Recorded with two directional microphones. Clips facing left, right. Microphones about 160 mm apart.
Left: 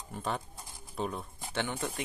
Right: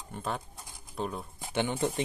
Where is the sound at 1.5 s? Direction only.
15° right (ahead or behind).